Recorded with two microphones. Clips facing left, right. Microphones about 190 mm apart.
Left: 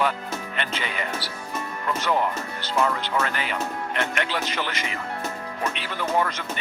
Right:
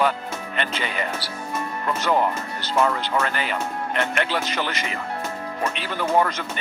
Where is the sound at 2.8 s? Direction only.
40° right (ahead or behind).